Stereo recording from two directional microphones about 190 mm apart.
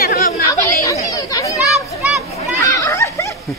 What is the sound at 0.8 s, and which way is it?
Chatter, 20° left (ahead or behind).